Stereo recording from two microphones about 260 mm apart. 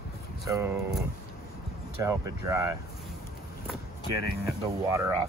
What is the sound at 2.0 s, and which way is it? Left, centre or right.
Speech, centre.